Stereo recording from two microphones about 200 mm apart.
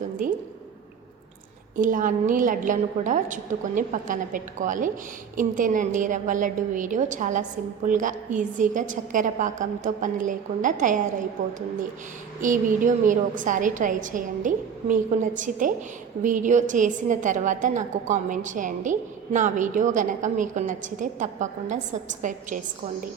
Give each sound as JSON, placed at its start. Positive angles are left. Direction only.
{"t": 0.2, "sound": "a woman's voice", "side_deg": -40}
{"t": 1.7, "sound": "a woman's voice", "side_deg": -40}
{"t": 12.4, "sound": "a woman's voice", "side_deg": -40}